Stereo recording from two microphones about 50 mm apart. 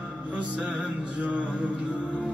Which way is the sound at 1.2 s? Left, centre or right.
Right.